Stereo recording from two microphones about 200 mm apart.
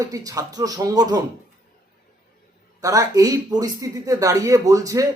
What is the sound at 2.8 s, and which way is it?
A man's voice, 15° right (ahead or behind).